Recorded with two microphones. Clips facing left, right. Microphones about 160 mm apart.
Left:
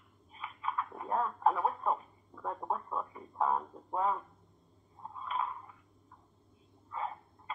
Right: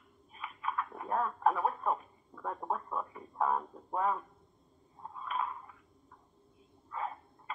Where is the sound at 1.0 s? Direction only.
20° left (ahead or behind).